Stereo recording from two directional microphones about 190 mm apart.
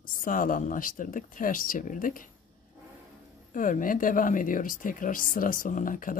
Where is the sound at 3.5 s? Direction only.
45° left (ahead or behind).